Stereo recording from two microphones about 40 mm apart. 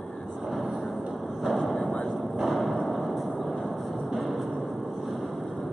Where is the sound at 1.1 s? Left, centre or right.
Centre.